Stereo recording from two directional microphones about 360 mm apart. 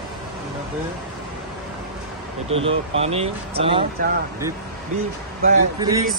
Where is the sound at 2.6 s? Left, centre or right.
Centre.